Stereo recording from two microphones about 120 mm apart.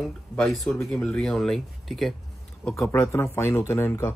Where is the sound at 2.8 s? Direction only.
25° left (ahead or behind).